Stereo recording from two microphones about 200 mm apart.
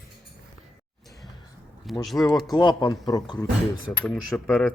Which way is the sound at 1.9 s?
Centre (ahead or behind).